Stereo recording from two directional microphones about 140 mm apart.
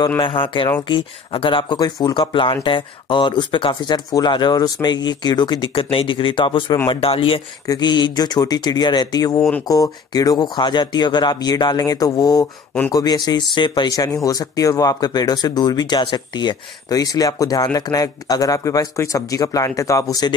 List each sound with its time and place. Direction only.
0.2 s speech: 35° left (ahead or behind)
7.6 s speech: 30° left (ahead or behind)
9.4 s speech: 10° left (ahead or behind)
9.7 s speech: 25° left (ahead or behind)